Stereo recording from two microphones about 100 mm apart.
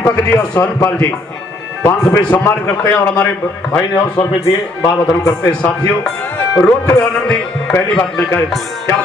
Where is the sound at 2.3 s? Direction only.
25° left (ahead or behind).